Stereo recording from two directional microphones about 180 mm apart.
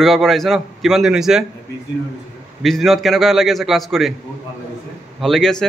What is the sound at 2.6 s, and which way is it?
A man's voice, centre (ahead or behind).